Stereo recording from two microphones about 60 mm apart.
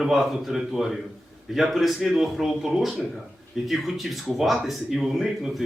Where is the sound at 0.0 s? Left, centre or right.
Centre.